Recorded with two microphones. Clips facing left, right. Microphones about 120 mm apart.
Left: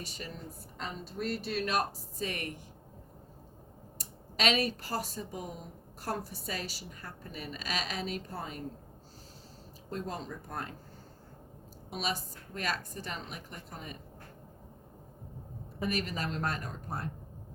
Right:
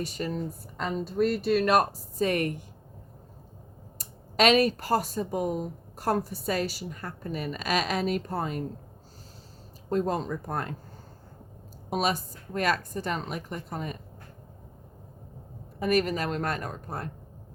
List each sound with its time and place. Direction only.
0.0 s a woman's voice: 50° right (ahead or behind)
3.9 s speech: 50° right (ahead or behind)
9.9 s speech: 55° right (ahead or behind)
11.9 s a woman's voice: 55° right (ahead or behind)
15.9 s speech: 55° right (ahead or behind)